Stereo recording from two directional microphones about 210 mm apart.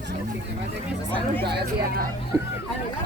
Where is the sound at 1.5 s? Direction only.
50° right (ahead or behind).